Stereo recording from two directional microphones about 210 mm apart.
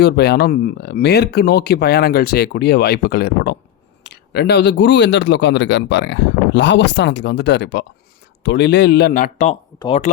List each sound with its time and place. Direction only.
0.0 s speech: 50° left (ahead or behind)
9.7 s speech: 20° left (ahead or behind)